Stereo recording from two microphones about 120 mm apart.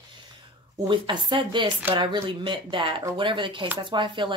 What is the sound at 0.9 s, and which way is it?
Speech, 40° right (ahead or behind).